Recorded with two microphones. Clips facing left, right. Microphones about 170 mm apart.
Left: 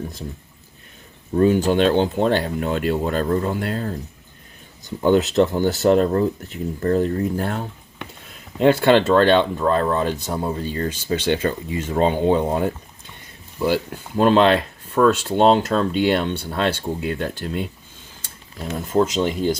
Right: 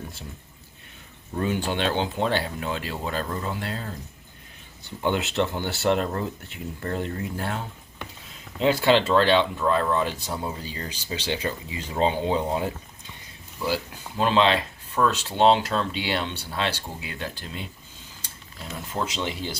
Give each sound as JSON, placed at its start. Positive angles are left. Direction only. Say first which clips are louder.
{"t": 1.4, "sound": "speech", "louder": "left 10 dB", "side_deg": 45}
{"t": 5.0, "sound": "speech", "louder": "left 8 dB", "side_deg": 40}
{"t": 8.5, "sound": "speech", "louder": "left 5 dB", "side_deg": 55}
{"t": 9.6, "sound": "speech", "louder": "left 4 dB", "side_deg": 40}
{"t": 13.7, "sound": "speech", "louder": "left 7 dB", "side_deg": 55}
{"t": 18.9, "sound": "speech", "louder": "left 10 dB", "side_deg": 45}